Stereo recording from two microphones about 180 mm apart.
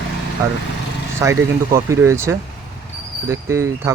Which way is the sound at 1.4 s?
15° right (ahead or behind).